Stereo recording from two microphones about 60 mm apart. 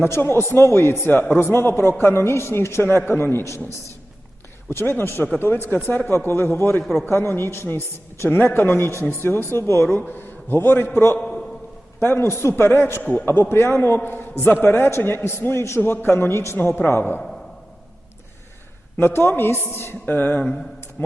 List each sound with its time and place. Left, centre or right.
0.0 s a man's voice: left
4.7 s a man's voice: left
10.1 s a man's voice: left
13.0 s a man's voice: left
13.2 s a man's voice: left
17.0 s a man's voice: left
18.9 s a man's voice: left